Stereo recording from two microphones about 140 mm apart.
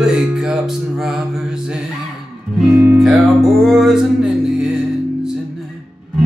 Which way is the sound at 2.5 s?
5° right (ahead or behind).